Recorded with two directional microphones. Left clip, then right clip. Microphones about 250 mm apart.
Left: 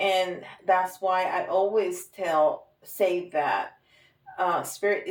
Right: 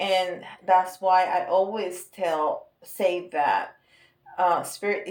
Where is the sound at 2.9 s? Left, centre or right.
Right.